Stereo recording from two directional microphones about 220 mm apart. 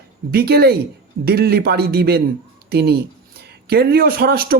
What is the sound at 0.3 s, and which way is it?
Speech, 45° right (ahead or behind).